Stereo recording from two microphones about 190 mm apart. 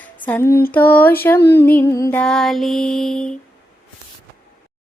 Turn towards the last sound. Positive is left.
turn(degrees=5)  # may be behind; listen again after turning